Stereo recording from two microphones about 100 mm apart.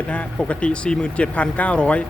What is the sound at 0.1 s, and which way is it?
Speech, 10° left (ahead or behind).